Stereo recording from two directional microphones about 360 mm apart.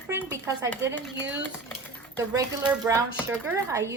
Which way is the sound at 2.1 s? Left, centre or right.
Centre.